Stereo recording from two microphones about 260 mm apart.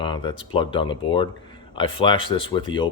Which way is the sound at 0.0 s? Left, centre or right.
Centre.